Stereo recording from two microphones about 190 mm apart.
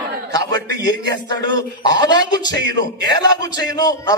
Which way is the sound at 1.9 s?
20° left (ahead or behind).